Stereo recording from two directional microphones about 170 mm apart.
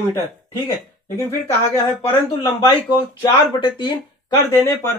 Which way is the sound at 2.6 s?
25° left (ahead or behind).